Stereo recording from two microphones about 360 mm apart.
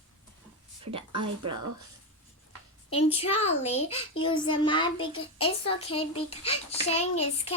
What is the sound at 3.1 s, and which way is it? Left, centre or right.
A child's voice, centre.